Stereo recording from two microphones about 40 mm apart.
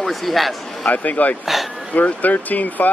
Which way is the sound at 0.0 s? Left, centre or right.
Centre.